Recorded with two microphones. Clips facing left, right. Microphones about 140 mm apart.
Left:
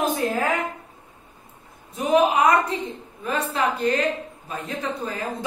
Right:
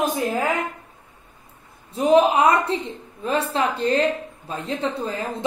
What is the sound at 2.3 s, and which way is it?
A woman's voice, 30° right (ahead or behind).